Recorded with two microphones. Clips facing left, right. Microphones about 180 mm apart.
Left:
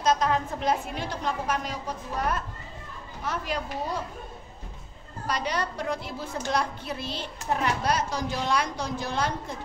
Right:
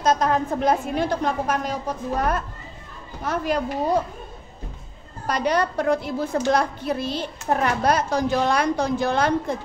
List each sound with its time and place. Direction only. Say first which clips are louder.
0.0 s a woman's voice: right 4 dB; 45° right (ahead or behind)
5.2 s a woman's voice: right 7 dB; 50° right (ahead or behind)